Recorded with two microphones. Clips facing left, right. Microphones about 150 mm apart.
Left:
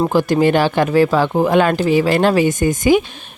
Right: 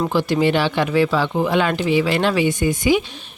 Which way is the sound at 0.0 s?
45° left (ahead or behind).